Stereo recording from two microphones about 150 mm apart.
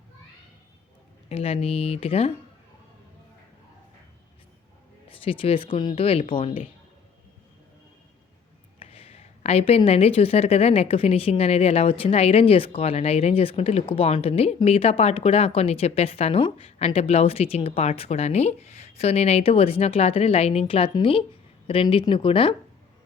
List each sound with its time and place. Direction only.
1.3 s speech: 40° left (ahead or behind)
5.0 s speech: 40° left (ahead or behind)
8.8 s speech: 40° left (ahead or behind)